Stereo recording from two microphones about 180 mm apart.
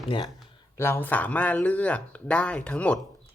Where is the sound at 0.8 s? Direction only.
15° left (ahead or behind).